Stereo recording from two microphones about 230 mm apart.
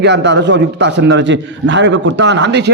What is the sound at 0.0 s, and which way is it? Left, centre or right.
A man's voice, right.